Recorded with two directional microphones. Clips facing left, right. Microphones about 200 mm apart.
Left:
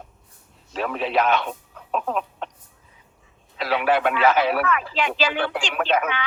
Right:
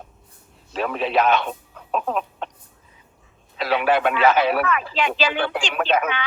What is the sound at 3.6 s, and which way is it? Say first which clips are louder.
Speech: right 1 dB; 25° right (ahead or behind).